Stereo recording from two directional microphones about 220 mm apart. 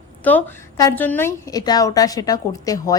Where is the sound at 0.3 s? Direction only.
10° left (ahead or behind).